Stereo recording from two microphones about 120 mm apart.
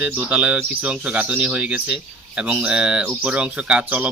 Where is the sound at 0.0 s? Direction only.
10° right (ahead or behind).